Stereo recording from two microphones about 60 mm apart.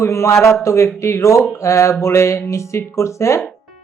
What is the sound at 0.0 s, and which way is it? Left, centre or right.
Speech, left.